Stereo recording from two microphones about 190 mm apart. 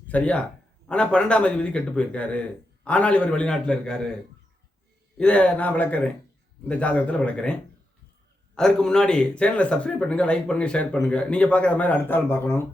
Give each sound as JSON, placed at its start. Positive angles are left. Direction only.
{"t": 0.1, "sound": "a man's voice", "side_deg": 5}
{"t": 5.1, "sound": "a man's voice", "side_deg": 5}
{"t": 8.5, "sound": "speech", "side_deg": 5}